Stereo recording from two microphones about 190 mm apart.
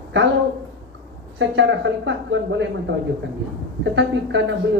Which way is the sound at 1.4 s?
70° right (ahead or behind).